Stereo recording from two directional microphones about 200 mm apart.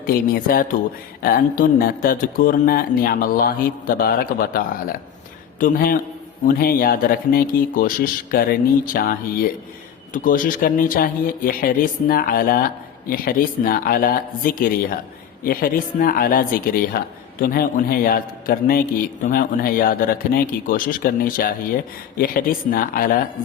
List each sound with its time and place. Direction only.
0.1 s speech: 45° left (ahead or behind)